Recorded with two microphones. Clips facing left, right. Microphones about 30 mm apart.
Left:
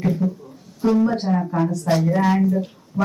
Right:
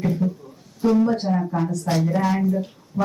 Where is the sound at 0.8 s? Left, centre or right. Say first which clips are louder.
Even; centre.